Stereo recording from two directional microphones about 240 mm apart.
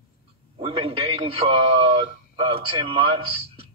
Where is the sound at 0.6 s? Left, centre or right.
Right.